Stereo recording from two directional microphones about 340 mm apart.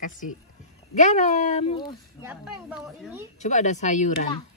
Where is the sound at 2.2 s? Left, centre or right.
Centre.